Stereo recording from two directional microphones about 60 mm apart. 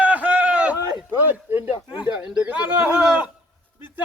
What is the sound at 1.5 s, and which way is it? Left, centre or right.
Speech, right.